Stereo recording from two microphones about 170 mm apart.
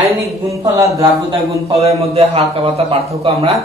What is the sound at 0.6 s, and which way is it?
Speech, 20° right (ahead or behind).